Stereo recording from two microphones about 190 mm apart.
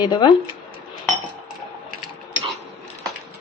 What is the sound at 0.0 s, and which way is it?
Speech, 25° left (ahead or behind).